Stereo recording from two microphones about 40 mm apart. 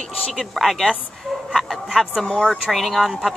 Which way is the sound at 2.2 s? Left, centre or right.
Centre.